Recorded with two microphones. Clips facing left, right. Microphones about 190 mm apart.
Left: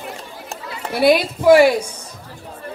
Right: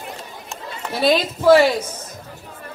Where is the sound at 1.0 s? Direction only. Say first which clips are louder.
Left 3 dB; 15° left (ahead or behind).